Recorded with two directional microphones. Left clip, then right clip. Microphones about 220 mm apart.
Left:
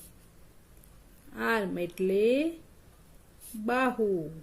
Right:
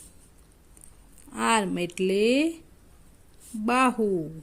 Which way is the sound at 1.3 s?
40° right (ahead or behind).